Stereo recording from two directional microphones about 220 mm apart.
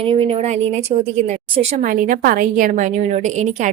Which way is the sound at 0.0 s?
25° right (ahead or behind).